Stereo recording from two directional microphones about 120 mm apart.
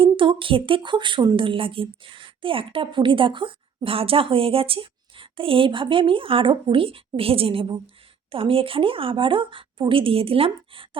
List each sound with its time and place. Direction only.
0.0 s a woman's voice: 45° right (ahead or behind)